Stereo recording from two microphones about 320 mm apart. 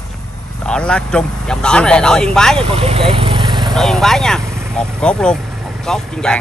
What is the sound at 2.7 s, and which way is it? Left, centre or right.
Vehicle, centre.